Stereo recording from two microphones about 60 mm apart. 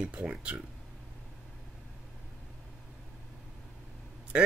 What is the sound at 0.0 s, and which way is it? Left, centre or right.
Speech, centre.